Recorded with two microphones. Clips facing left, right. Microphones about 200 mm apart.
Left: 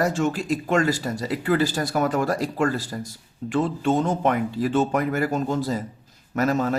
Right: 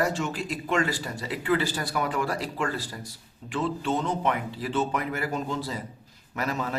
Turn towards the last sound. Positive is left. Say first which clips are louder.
# left 8 dB
turn(degrees=45)  # may be behind; listen again after turning